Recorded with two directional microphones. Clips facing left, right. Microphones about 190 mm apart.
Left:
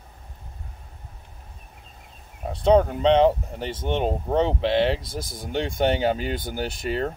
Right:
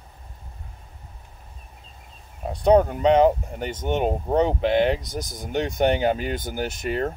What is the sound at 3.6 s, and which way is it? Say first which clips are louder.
Speech: even; 30° left (ahead or behind).